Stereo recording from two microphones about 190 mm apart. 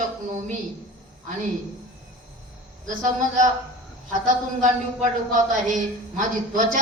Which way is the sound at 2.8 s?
40° right (ahead or behind).